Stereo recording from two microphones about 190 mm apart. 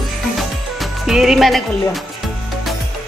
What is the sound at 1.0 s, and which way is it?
Speech, centre (ahead or behind).